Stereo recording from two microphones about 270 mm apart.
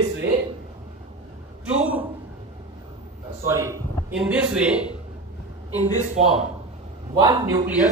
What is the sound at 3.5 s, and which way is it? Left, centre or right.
A man's voice, centre.